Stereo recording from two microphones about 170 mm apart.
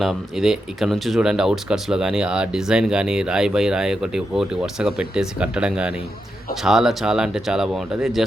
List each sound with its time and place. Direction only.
0.0 s speech: centre (ahead or behind)